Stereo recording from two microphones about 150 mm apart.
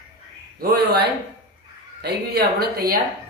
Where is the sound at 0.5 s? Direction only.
90° right.